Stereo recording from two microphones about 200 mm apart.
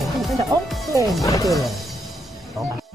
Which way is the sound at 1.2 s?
15° left (ahead or behind).